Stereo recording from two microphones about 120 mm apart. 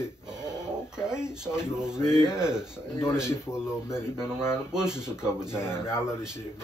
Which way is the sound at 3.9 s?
20° left (ahead or behind).